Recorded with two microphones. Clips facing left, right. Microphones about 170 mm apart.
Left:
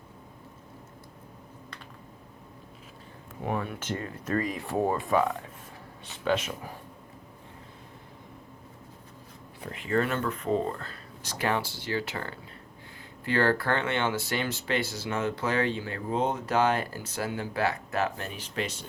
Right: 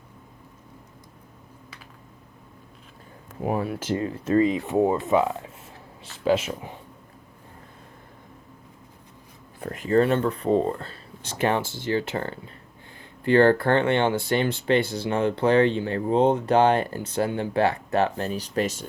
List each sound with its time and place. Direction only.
3.4 s speech: 35° right (ahead or behind)
9.6 s speech: 45° right (ahead or behind); by 11.6 s 25° right (ahead or behind)
11.6 s speech: 50° right (ahead or behind)
12.1 s speech: 35° right (ahead or behind)